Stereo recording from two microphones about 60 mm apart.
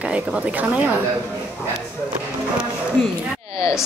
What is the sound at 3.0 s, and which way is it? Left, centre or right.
Speech, centre.